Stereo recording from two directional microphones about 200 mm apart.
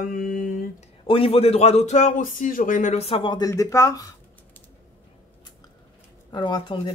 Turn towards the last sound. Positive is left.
turn(degrees=25)  # may be behind; listen again after turning